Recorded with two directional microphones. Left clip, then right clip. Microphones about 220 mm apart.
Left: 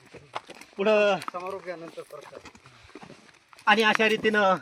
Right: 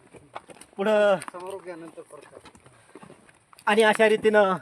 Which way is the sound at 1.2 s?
5° right (ahead or behind).